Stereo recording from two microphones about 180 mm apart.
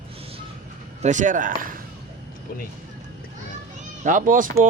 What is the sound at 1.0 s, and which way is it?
Speech, 45° right (ahead or behind).